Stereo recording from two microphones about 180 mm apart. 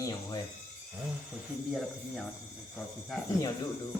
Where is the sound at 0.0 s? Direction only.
20° left (ahead or behind).